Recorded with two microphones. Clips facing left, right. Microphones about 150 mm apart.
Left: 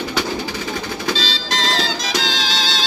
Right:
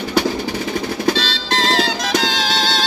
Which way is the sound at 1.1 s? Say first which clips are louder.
Right 3 dB; 60° right (ahead or behind).